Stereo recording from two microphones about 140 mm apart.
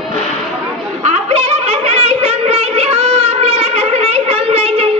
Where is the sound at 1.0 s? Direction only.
50° right (ahead or behind).